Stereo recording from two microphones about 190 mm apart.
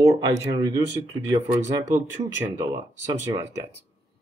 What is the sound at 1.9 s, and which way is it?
Speech, 15° right (ahead or behind).